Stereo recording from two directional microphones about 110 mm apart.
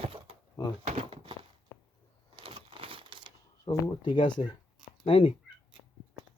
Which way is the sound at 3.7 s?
45° left (ahead or behind).